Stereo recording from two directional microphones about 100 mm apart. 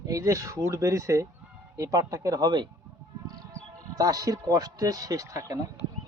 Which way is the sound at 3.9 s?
40° right (ahead or behind).